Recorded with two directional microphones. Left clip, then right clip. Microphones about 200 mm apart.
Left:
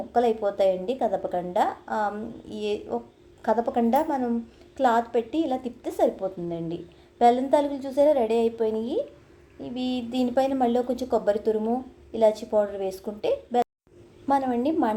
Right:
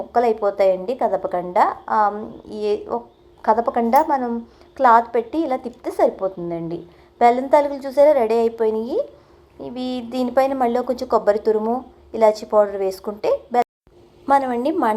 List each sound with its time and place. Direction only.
0.1 s a woman's voice: centre (ahead or behind)
6.5 s speech: 30° right (ahead or behind)
7.2 s a woman's voice: centre (ahead or behind)
14.3 s a woman's voice: 10° right (ahead or behind)